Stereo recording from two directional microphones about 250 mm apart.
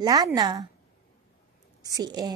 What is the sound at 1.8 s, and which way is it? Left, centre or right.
Speech, centre.